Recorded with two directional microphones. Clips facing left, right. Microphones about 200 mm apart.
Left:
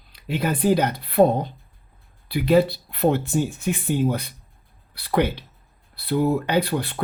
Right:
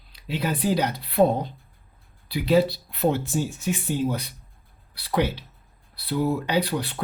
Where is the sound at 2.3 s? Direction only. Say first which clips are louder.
Left 2 dB; 55° left (ahead or behind).